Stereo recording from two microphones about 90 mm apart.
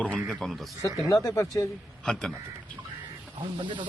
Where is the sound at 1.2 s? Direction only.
35° left (ahead or behind).